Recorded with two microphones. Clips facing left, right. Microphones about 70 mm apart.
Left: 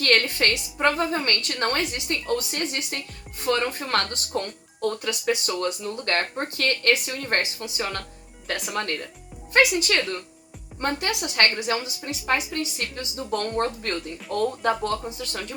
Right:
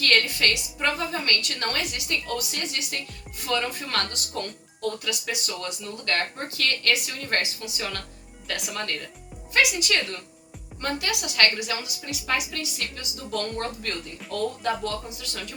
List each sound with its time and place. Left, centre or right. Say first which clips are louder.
0.0 s speech: left 1 dB; left